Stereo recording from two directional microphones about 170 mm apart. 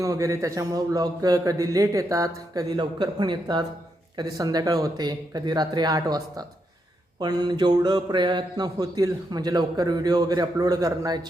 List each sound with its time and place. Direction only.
0.0 s speech: 20° right (ahead or behind)